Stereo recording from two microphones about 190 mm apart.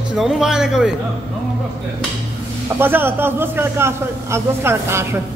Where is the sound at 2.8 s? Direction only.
10° right (ahead or behind).